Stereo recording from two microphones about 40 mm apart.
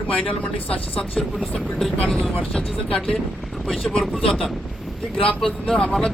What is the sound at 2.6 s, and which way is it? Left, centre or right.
Speech, left.